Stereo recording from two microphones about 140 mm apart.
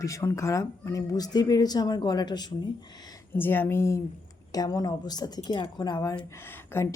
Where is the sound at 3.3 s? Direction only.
15° left (ahead or behind).